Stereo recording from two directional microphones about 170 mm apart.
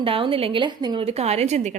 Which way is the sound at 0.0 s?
30° right (ahead or behind).